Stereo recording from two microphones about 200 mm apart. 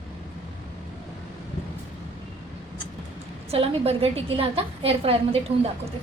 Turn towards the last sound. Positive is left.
turn(degrees=-30)  # may be behind; listen again after turning